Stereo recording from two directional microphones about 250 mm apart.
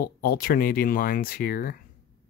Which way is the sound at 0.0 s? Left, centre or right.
Left.